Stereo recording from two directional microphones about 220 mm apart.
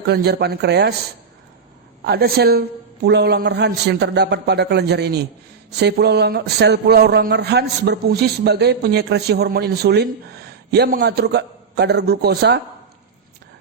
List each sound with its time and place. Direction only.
0.1 s speech: 50° right (ahead or behind)
2.0 s speech: 45° right (ahead or behind)